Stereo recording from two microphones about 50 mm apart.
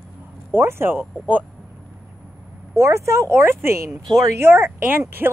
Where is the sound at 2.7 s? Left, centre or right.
Right.